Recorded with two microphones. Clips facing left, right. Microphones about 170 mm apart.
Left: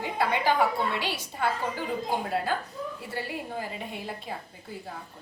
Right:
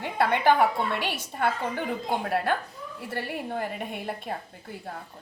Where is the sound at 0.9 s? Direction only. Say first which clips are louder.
Right 1 dB; 55° right (ahead or behind).